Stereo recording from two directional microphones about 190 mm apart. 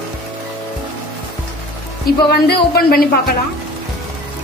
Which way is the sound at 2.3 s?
55° left (ahead or behind).